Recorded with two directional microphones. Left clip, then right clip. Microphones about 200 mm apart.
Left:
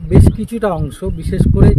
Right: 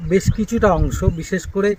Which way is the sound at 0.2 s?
10° left (ahead or behind).